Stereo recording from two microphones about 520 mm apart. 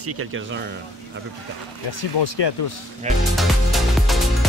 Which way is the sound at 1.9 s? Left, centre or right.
Left.